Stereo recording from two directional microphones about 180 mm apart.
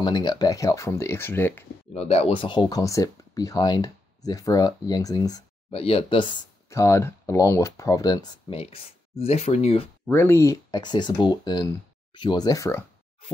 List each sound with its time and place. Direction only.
0.0 s speech: 25° left (ahead or behind)
2.0 s speech: 35° left (ahead or behind)
5.7 s speech: 30° left (ahead or behind)
6.7 s speech: 15° left (ahead or behind); by 9.8 s 35° left (ahead or behind)
10.0 s speech: 15° left (ahead or behind)